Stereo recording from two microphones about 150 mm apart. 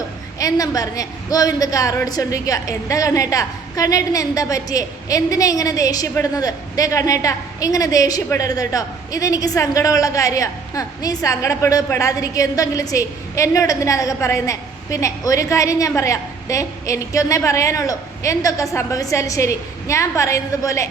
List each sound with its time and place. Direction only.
0.3 s a woman's voice: 25° left (ahead or behind)